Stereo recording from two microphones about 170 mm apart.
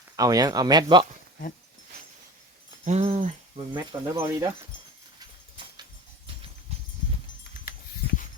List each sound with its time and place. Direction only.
0.2 s speech: 20° right (ahead or behind)
2.8 s a sound: 40° right (ahead or behind)
3.7 s speech: 20° right (ahead or behind)
5.6 s horse: 30° right (ahead or behind)